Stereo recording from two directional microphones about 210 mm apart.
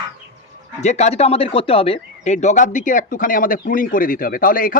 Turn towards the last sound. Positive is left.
turn(degrees=40)  # may be behind; listen again after turning